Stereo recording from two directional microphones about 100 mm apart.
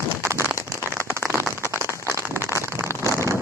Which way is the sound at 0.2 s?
30° right (ahead or behind).